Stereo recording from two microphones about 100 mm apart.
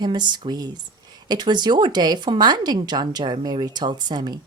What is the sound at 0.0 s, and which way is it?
Speech, 50° right (ahead or behind).